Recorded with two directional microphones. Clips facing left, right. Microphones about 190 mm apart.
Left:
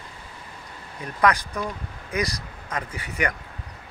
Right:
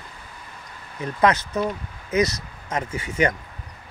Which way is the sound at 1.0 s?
25° right (ahead or behind).